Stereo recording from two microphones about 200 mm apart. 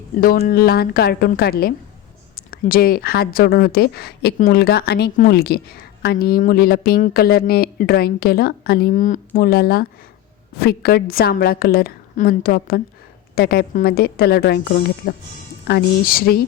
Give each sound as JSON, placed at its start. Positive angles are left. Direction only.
{"t": 0.2, "sound": "speech", "side_deg": 50}